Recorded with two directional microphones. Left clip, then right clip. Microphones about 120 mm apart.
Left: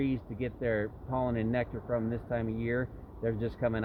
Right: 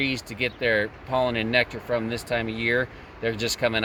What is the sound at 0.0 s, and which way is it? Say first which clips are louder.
Speech: right 8 dB; 30° left (ahead or behind).